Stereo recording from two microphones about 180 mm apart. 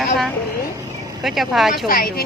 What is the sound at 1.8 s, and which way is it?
Speech, 55° left (ahead or behind).